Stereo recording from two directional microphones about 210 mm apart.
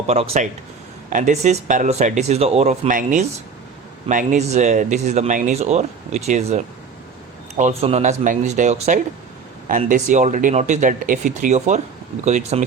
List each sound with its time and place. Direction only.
0.1 s speech: 30° right (ahead or behind)